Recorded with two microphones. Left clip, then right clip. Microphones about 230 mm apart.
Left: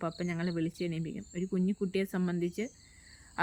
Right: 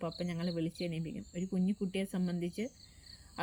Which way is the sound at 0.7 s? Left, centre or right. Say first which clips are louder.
Left 3 dB; left.